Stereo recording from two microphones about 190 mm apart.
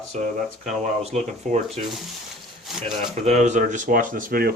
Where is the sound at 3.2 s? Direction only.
35° right (ahead or behind).